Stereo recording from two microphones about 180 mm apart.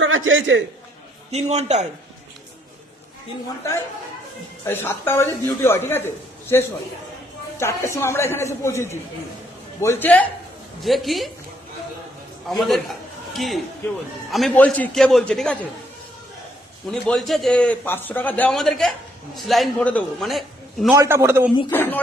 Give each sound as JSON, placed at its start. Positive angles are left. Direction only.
{"t": 0.0, "sound": "a man's voice", "side_deg": -90}
{"t": 1.3, "sound": "a man's voice", "side_deg": -35}
{"t": 4.6, "sound": "a man's voice", "side_deg": 10}
{"t": 12.5, "sound": "a man's voice", "side_deg": 0}
{"t": 16.9, "sound": "a man's voice", "side_deg": 5}
{"t": 20.9, "sound": "a man's voice", "side_deg": -15}
{"t": 21.7, "sound": "speech", "side_deg": 10}